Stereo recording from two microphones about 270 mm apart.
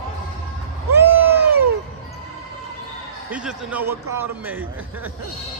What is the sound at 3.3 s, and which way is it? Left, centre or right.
A man's voice, centre.